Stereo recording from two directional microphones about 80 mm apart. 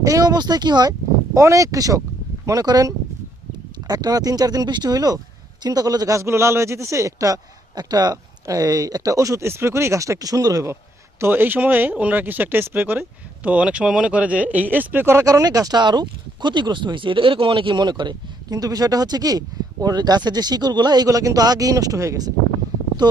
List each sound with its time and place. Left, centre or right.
0.0 s speech: right
6.1 s a man's voice: right
7.8 s speech: right
11.2 s speech: right
15.2 s speech: right
18.5 s speech: right